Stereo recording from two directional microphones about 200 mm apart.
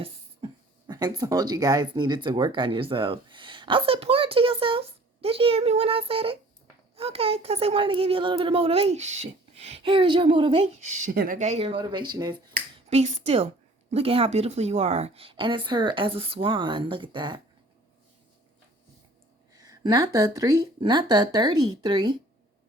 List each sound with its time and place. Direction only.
0.0 s a sound: 25° right (ahead or behind)
1.2 s speech: 20° right (ahead or behind)
12.9 s a woman's voice: 30° right (ahead or behind)
19.5 s speech: 20° right (ahead or behind)